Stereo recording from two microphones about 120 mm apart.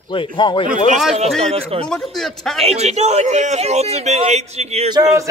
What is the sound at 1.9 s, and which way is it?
Speech, 5° left (ahead or behind).